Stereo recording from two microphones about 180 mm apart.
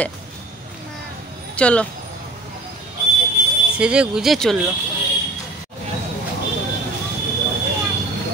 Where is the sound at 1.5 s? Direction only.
5° left (ahead or behind).